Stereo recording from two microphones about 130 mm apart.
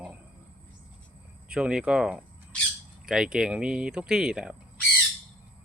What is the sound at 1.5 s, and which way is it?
Speech, 5° right (ahead or behind).